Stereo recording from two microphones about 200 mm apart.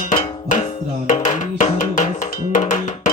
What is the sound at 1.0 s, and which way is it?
Music, 35° left (ahead or behind).